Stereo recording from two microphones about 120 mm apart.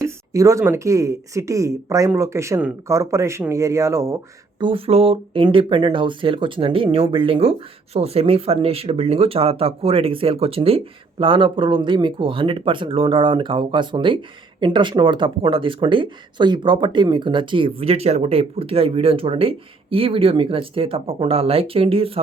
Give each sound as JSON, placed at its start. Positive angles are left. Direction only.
{"t": 0.3, "sound": "speech", "side_deg": -25}
{"t": 4.6, "sound": "speech", "side_deg": -50}